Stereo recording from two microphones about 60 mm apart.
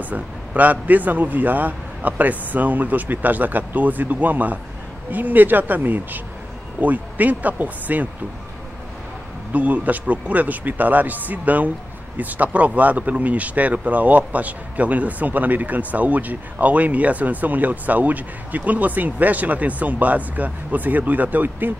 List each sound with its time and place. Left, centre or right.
0.0 s speech: right
9.5 s speech: right